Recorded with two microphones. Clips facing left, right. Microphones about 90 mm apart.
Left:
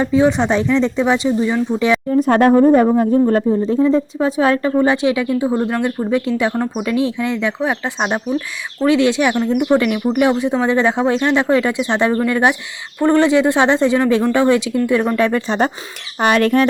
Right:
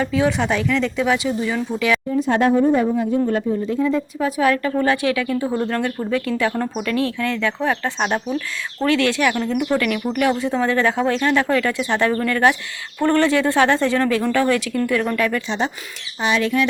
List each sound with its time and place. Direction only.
0.0 s speech: 20° left (ahead or behind)
2.1 s speech: 50° left (ahead or behind); by 15.4 s 30° left (ahead or behind)
15.4 s speech: 50° left (ahead or behind)